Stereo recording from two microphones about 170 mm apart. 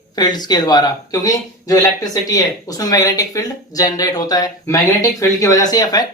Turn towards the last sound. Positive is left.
turn(degrees=20)  # may be behind; listen again after turning